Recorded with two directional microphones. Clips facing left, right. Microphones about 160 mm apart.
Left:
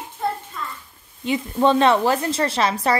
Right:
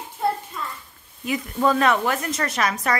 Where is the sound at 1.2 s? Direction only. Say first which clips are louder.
Left 3 dB; 25° left (ahead or behind).